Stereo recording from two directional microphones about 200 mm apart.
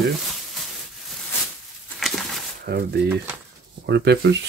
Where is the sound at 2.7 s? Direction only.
55° right (ahead or behind).